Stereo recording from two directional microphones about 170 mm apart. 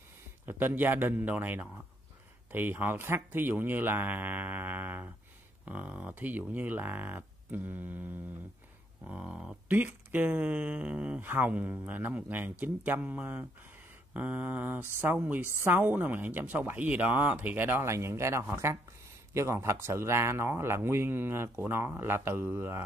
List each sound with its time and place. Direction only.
0.5 s speech: 10° right (ahead or behind)